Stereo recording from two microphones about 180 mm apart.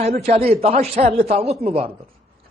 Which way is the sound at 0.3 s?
35° right (ahead or behind).